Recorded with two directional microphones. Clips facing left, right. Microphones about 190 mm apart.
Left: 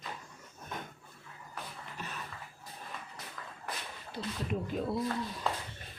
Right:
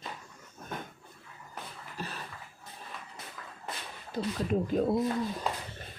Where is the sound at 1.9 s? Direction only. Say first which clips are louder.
Right 5 dB; 35° right (ahead or behind).